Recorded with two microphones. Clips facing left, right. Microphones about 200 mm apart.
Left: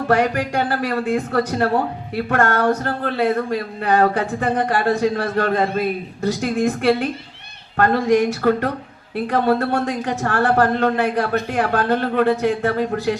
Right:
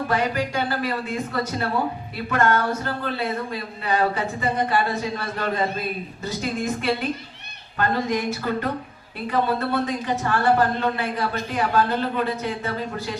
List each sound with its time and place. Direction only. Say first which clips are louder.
0.1 s speech: left 7 dB; 75° left (ahead or behind)